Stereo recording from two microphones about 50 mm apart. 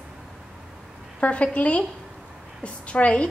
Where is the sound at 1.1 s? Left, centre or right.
Left.